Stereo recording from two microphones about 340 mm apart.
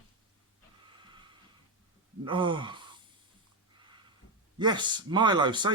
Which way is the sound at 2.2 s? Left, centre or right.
Centre.